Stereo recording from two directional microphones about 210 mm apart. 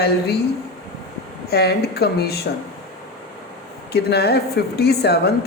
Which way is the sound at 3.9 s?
50° left (ahead or behind).